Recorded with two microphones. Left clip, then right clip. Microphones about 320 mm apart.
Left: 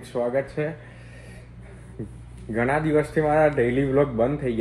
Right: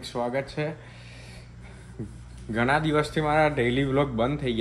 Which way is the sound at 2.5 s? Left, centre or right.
Centre.